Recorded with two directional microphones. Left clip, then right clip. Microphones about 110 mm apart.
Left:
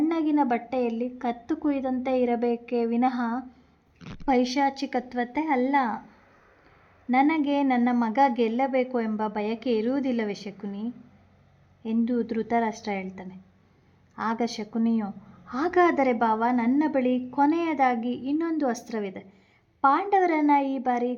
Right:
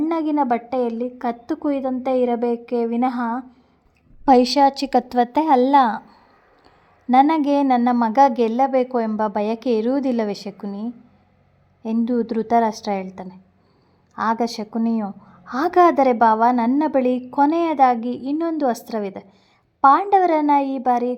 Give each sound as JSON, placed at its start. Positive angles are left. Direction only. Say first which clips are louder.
{"t": 0.0, "sound": "a woman's voice", "louder": "right 4 dB", "side_deg": -40}
{"t": 4.3, "sound": "a woman's voice", "louder": "right 10 dB", "side_deg": -60}
{"t": 7.1, "sound": "a woman's voice", "louder": "right 8 dB", "side_deg": -60}